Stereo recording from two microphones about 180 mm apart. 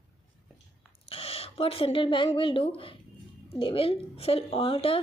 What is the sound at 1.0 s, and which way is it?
A woman's voice, 30° left (ahead or behind).